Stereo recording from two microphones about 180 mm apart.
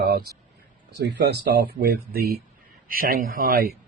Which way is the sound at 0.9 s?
70° right (ahead or behind).